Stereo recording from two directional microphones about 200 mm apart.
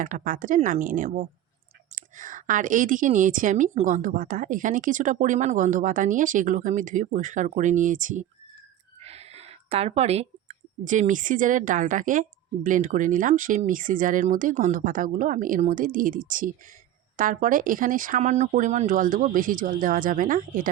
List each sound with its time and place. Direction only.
0.0 s a woman's voice: 40° right (ahead or behind)